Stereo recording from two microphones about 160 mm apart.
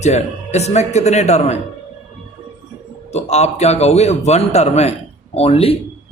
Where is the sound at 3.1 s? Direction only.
45° left (ahead or behind).